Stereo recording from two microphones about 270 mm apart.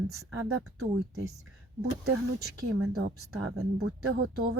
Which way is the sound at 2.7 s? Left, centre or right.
Right.